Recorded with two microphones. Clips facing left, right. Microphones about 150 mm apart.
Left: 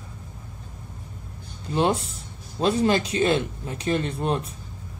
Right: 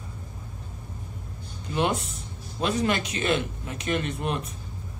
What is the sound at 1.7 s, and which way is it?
Speech, 30° left (ahead or behind).